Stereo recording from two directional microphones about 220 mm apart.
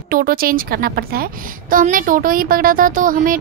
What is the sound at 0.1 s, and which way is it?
Speech, 40° right (ahead or behind).